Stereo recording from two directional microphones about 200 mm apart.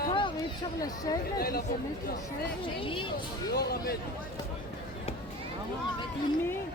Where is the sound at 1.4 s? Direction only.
50° left (ahead or behind).